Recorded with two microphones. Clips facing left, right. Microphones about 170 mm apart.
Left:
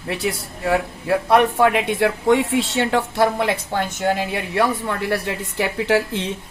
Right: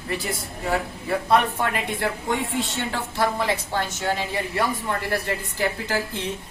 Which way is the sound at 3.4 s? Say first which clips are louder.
Left 3 dB; 55° left (ahead or behind).